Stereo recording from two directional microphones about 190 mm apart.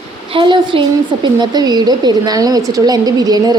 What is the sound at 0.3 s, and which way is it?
A woman's voice, 25° right (ahead or behind).